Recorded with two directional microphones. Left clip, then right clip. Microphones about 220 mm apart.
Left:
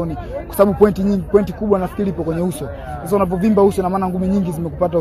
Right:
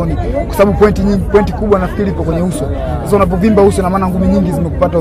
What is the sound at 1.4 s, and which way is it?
A man's voice, 45° left (ahead or behind).